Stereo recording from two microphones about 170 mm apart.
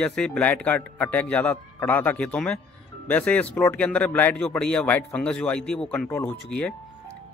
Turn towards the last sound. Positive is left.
turn(degrees=5)  # may be behind; listen again after turning